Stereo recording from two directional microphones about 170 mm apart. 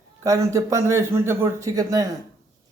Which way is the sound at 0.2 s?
20° right (ahead or behind).